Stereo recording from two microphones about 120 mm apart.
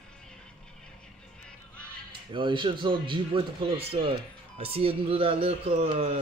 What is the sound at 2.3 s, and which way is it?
Speech, 40° right (ahead or behind).